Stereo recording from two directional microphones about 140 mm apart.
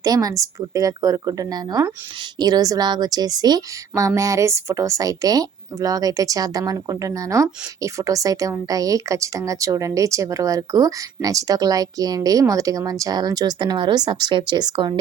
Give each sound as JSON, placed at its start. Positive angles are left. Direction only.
{"t": 0.0, "sound": "a woman's voice", "side_deg": -25}